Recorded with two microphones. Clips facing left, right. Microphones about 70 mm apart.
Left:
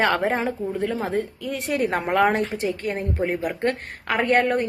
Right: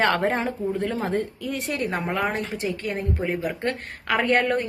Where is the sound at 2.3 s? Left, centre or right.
Left.